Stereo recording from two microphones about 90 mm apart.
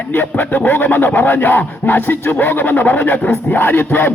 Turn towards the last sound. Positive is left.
turn(degrees=25)  # may be behind; listen again after turning